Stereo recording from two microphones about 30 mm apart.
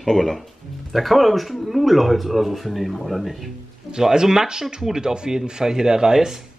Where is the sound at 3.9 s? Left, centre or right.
Right.